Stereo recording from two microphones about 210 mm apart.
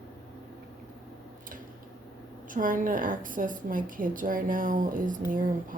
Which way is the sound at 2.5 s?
40° right (ahead or behind).